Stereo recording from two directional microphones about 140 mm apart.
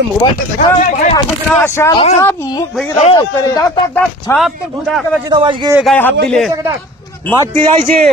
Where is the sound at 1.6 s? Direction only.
20° left (ahead or behind).